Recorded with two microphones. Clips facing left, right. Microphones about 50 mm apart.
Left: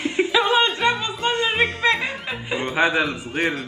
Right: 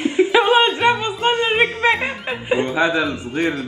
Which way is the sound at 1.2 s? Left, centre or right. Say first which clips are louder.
Right 4 dB; right.